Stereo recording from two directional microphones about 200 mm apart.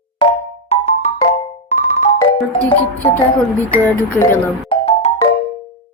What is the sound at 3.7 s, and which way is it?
Speech, 10° left (ahead or behind).